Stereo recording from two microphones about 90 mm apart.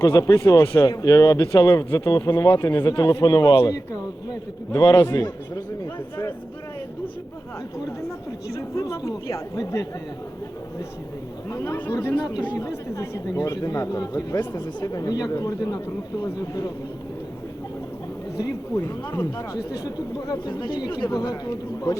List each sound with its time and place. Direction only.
0.0 s speech: 40° left (ahead or behind)
0.6 s speech: 25° left (ahead or behind)
0.9 s speech: 40° left (ahead or behind)
4.7 s speech: 40° left (ahead or behind)
8.9 s speech: 40° left (ahead or behind)
11.5 s speech: 35° left (ahead or behind)
12.1 s speech: 55° left (ahead or behind)
18.3 s speech: 45° left (ahead or behind)